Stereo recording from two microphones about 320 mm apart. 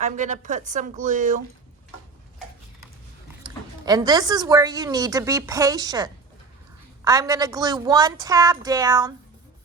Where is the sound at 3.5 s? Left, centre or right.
Centre.